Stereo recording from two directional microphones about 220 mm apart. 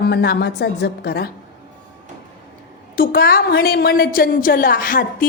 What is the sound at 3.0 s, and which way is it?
A woman's voice, 40° left (ahead or behind).